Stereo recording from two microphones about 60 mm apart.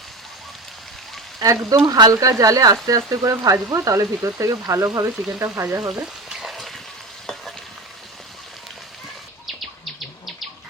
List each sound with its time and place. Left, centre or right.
1.4 s speech: right
2.2 s frying: right
3.8 s speech: right
5.9 s frying: centre